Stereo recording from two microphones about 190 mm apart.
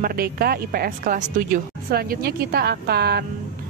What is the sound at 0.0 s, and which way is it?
A woman's voice, 50° right (ahead or behind).